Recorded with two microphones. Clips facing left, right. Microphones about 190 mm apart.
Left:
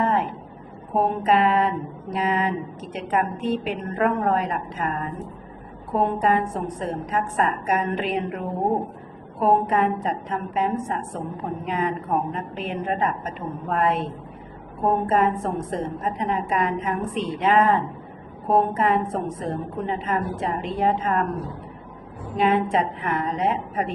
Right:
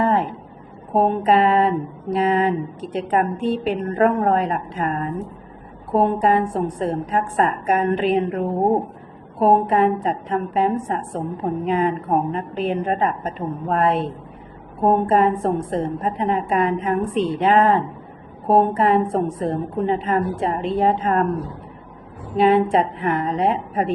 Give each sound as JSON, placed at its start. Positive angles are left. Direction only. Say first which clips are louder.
{"t": 0.0, "sound": "a sound", "louder": "right 3 dB", "side_deg": -30}
{"t": 2.0, "sound": "a woman's voice", "louder": "right 5 dB", "side_deg": -30}
{"t": 22.7, "sound": "a woman's voice", "louder": "right 4 dB", "side_deg": -35}